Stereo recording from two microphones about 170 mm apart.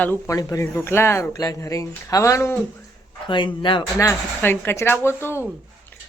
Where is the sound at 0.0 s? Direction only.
15° left (ahead or behind).